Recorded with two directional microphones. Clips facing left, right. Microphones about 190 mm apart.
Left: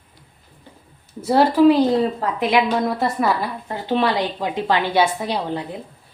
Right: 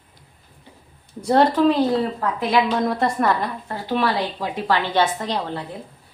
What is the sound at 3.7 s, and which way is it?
A woman's voice, 20° left (ahead or behind).